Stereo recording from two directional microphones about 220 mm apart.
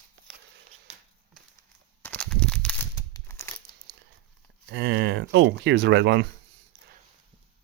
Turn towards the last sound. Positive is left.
turn(degrees=-55)  # may be behind; listen again after turning